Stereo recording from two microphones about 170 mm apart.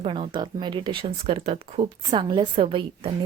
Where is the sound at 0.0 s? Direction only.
30° right (ahead or behind).